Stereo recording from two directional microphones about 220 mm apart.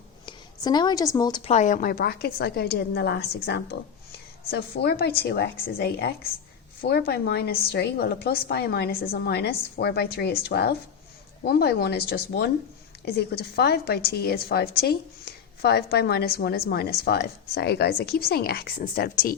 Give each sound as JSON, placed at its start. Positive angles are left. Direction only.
{"t": 0.3, "sound": "a woman's voice", "side_deg": 20}
{"t": 1.5, "sound": "a woman's voice", "side_deg": 35}